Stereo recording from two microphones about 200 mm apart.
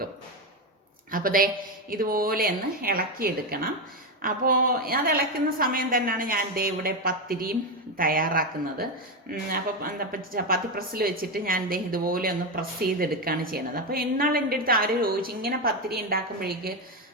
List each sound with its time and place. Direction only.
1.1 s a woman's voice: 45° right (ahead or behind)